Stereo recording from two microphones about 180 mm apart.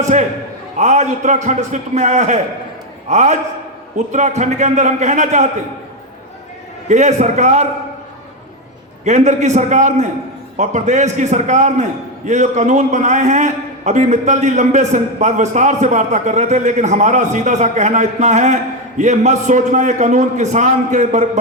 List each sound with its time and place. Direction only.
0.0 s a man's voice: 40° right (ahead or behind)
6.8 s a man's voice: 40° right (ahead or behind)
9.0 s a man's voice: 40° right (ahead or behind)